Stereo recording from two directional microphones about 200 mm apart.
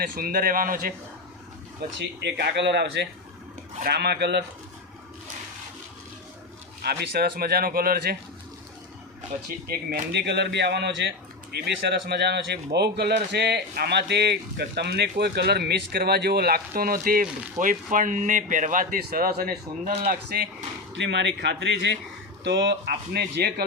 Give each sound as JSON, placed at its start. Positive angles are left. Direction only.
{"t": 0.0, "sound": "speech", "side_deg": -45}
{"t": 2.0, "sound": "speech", "side_deg": -60}
{"t": 6.8, "sound": "speech", "side_deg": -50}
{"t": 9.6, "sound": "speech", "side_deg": -50}